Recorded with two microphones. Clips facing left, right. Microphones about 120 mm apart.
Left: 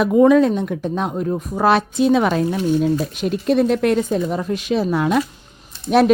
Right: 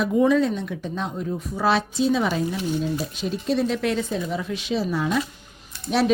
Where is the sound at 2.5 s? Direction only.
50° left (ahead or behind).